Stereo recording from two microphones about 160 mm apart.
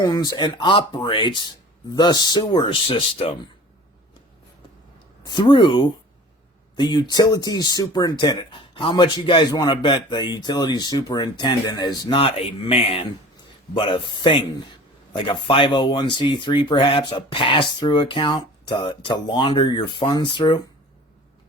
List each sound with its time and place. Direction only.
0.0 s speech: 25° left (ahead or behind)
5.2 s speech: 30° left (ahead or behind)